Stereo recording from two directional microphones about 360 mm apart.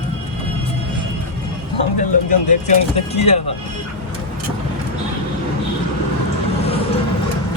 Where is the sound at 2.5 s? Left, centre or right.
Centre.